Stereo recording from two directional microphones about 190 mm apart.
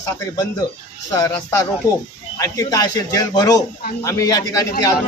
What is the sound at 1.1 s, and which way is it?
A man's voice, 20° left (ahead or behind).